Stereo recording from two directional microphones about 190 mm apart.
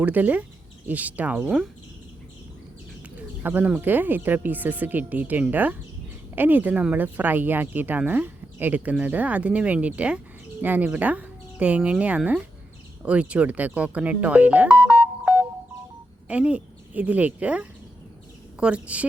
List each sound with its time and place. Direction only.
0.0 s speech: 10° right (ahead or behind)
3.2 s speech: 10° right (ahead or behind)
16.3 s a woman's voice: 5° right (ahead or behind)